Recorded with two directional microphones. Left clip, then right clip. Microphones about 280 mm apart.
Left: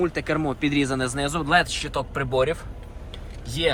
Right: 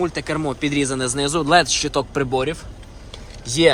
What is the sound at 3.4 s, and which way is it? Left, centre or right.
Speech, right.